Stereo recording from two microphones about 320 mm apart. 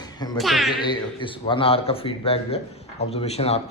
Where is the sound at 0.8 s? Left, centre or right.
Centre.